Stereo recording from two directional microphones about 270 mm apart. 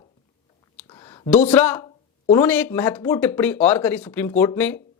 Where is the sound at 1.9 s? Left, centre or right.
Centre.